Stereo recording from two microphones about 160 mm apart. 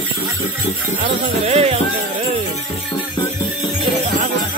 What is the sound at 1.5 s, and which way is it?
Speech, 40° right (ahead or behind).